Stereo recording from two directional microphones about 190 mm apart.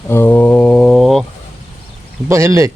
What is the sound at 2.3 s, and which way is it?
Speech, 15° right (ahead or behind).